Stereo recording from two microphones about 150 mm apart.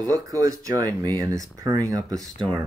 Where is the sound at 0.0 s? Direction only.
20° right (ahead or behind).